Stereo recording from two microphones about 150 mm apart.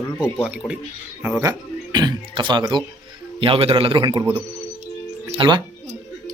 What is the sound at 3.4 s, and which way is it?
A man's voice, 35° right (ahead or behind).